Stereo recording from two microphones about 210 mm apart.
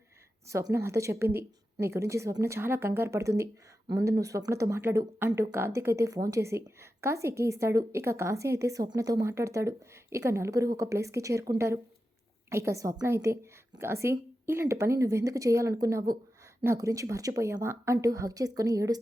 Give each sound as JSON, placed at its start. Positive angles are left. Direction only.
{"t": 0.4, "sound": "a woman's voice", "side_deg": -15}